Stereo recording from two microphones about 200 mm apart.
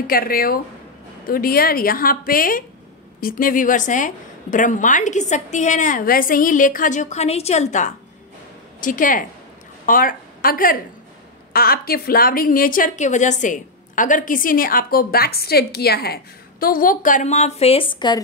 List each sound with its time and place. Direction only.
0.0 s a woman's voice: 45° left (ahead or behind); by 18.2 s 20° left (ahead or behind)